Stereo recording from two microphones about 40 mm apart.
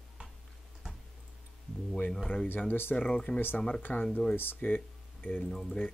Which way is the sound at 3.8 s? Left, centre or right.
Left.